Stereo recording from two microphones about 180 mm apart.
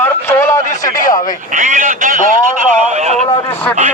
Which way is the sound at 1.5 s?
45° right (ahead or behind).